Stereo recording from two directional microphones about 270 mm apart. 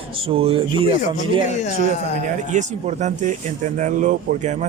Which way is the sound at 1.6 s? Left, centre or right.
Left.